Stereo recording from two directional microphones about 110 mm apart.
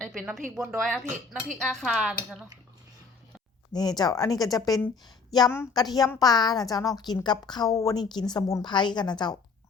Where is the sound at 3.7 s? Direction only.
40° left (ahead or behind).